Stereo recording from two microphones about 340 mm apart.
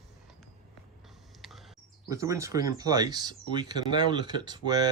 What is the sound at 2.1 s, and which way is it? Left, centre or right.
Speech, centre.